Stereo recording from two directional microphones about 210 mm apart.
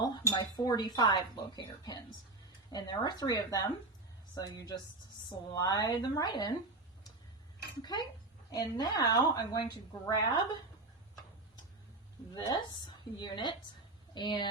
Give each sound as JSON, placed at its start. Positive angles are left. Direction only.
{"t": 0.0, "sound": "a woman's voice", "side_deg": 20}
{"t": 7.8, "sound": "a woman's voice", "side_deg": 20}
{"t": 12.3, "sound": "a woman's voice", "side_deg": 20}